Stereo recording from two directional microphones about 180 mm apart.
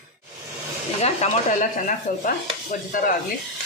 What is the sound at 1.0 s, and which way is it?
Speech, 40° left (ahead or behind).